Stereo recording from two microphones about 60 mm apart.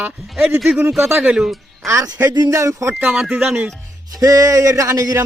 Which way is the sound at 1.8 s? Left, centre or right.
Right.